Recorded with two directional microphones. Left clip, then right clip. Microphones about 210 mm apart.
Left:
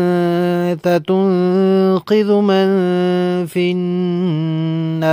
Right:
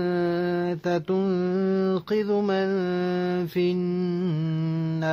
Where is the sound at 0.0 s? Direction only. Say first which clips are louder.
Left 9 dB; 45° left (ahead or behind).